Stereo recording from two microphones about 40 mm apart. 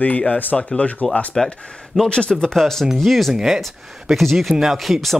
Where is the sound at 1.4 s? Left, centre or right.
Centre.